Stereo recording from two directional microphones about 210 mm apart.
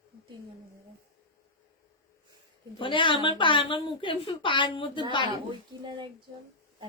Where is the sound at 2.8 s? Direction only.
25° left (ahead or behind).